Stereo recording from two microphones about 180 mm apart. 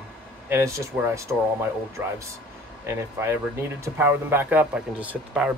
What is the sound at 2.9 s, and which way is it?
Speech, 15° right (ahead or behind).